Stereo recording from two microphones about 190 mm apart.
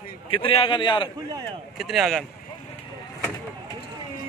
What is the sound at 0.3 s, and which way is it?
Speech, 30° left (ahead or behind).